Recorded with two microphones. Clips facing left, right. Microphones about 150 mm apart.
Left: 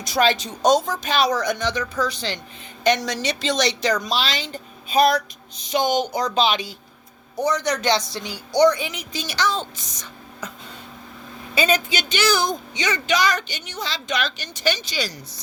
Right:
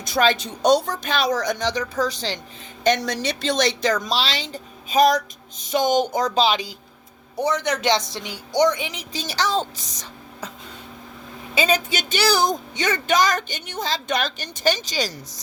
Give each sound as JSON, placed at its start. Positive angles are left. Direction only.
{"t": 0.0, "sound": "a woman's voice", "side_deg": -50}
{"t": 2.8, "sound": "a woman's voice", "side_deg": -50}
{"t": 4.2, "sound": "speech", "side_deg": -35}
{"t": 7.4, "sound": "speech", "side_deg": -25}
{"t": 11.9, "sound": "speech", "side_deg": -45}
{"t": 12.7, "sound": "a woman's voice", "side_deg": -50}